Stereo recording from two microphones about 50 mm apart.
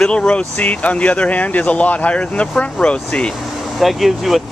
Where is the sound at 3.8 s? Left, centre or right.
Centre.